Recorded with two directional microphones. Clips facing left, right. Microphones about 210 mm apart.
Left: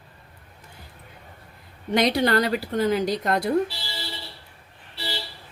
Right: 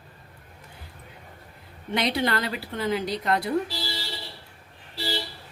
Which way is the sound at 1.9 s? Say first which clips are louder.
Left 5 dB; 40° left (ahead or behind).